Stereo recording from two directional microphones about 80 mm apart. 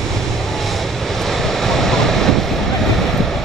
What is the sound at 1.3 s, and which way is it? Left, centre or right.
Waves, centre.